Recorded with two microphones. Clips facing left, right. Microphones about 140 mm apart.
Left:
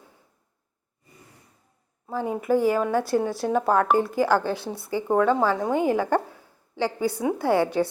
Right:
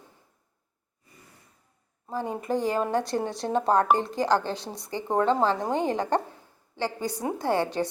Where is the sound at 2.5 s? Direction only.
20° right (ahead or behind).